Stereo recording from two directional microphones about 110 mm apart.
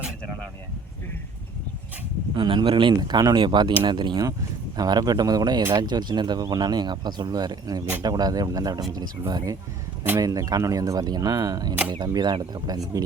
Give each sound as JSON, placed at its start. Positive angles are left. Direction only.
{"t": 2.3, "sound": "speech", "side_deg": -45}